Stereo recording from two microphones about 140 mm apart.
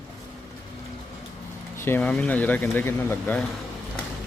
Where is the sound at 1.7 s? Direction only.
15° left (ahead or behind).